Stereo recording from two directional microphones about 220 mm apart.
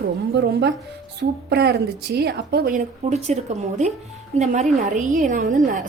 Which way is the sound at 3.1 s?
30° right (ahead or behind).